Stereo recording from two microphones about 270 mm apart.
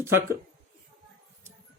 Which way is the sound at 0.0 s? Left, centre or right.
Centre.